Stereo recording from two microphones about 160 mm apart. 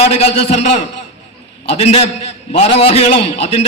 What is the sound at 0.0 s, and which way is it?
A man's voice, 40° left (ahead or behind).